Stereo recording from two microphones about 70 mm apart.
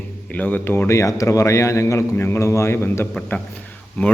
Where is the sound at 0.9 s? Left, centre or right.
Left.